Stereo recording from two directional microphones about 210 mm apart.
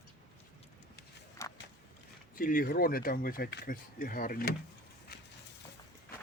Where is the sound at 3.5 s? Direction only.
55° left (ahead or behind).